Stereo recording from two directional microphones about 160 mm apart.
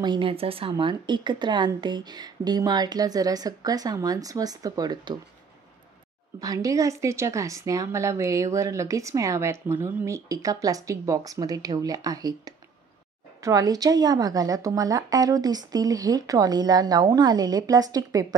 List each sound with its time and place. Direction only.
0.0 s a woman's voice: 30° right (ahead or behind)
6.4 s a woman's voice: 20° right (ahead or behind)